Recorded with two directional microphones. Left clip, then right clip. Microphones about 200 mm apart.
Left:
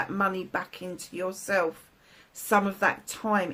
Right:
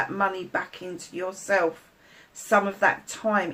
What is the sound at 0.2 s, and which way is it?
Speech, 45° left (ahead or behind).